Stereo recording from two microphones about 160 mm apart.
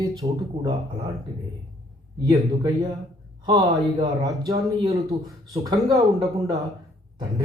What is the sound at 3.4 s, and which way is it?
Speech, 30° right (ahead or behind).